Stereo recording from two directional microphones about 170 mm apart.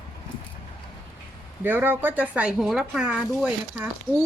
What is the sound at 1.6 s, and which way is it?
Speech, 10° right (ahead or behind).